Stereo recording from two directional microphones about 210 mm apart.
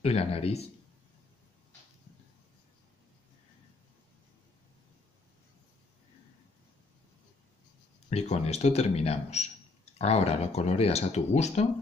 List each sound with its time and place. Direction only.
0.0 s a man's voice: 30° left (ahead or behind)
8.1 s speech: 30° left (ahead or behind)